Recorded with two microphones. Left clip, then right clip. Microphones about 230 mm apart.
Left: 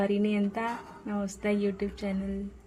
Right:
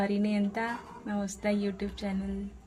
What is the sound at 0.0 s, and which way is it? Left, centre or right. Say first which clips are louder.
A woman's voice: left 2 dB; centre.